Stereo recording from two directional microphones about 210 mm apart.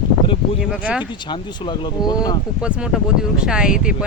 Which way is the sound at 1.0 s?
20° left (ahead or behind).